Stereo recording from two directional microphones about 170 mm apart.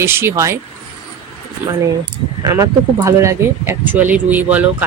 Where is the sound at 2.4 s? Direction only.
20° right (ahead or behind).